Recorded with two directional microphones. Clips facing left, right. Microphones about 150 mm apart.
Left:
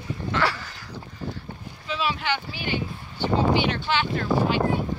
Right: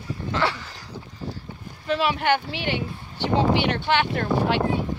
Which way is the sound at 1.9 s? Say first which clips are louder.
Right 5 dB; 60° right (ahead or behind).